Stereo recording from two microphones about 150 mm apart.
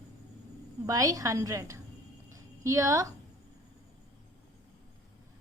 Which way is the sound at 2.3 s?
20° right (ahead or behind).